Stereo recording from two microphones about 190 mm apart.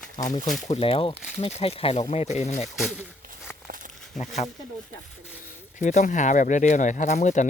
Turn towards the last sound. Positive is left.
turn(degrees=40)  # may be behind; listen again after turning